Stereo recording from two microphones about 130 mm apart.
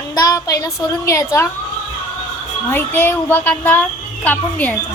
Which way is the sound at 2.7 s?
15° left (ahead or behind).